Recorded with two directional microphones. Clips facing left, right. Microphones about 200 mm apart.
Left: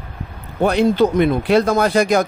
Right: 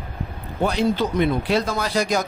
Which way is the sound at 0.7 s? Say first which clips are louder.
Left 7 dB; 60° left (ahead or behind).